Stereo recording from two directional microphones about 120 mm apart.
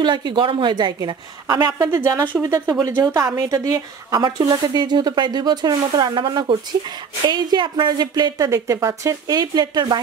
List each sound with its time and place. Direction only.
0.0 s a woman's voice: 40° right (ahead or behind)